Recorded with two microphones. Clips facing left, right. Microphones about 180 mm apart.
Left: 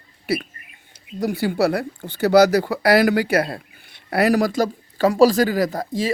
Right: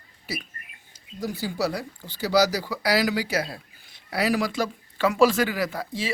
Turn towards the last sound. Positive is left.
turn(degrees=40)  # may be behind; listen again after turning